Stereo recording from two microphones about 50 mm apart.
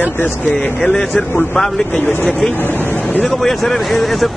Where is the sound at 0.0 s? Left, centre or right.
Left.